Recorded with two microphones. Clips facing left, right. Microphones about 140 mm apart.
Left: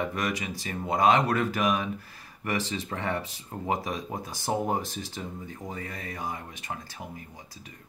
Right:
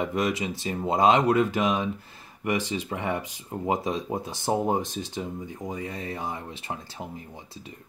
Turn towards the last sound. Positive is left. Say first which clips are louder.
# right 2 dB
turn(degrees=-25)  # may be behind; listen again after turning